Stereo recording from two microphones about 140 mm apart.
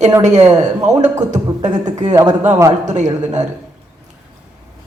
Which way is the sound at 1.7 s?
30° right (ahead or behind).